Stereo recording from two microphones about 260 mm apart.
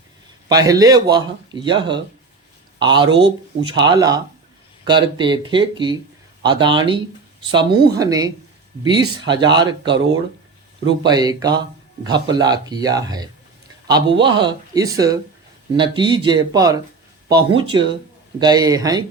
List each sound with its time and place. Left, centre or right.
0.4 s speech: centre
11.0 s speech: centre